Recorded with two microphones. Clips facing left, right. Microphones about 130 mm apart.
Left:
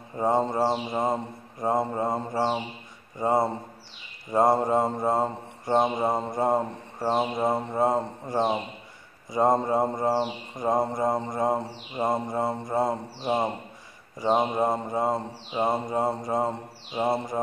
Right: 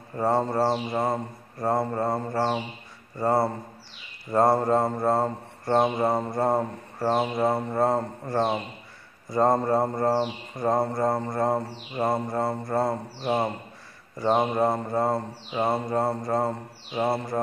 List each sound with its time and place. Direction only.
0.1 s mantra: 15° left (ahead or behind)